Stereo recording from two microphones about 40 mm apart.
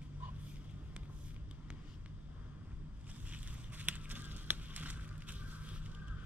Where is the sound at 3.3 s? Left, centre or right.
Right.